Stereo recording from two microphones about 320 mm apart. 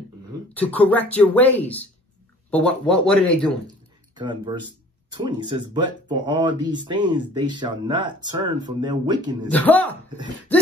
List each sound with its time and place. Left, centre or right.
0.6 s speech: centre
3.6 s a sound: centre
5.1 s speech: centre
9.5 s speech: centre